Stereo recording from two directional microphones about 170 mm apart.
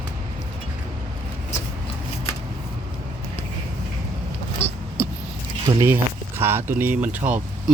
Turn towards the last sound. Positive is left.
turn(degrees=0)  # may be behind; listen again after turning